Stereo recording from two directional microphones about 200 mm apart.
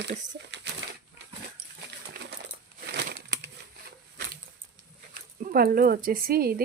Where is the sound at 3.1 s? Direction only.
45° right (ahead or behind).